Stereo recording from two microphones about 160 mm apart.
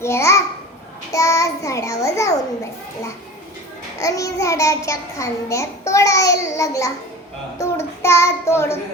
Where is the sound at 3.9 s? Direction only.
20° left (ahead or behind).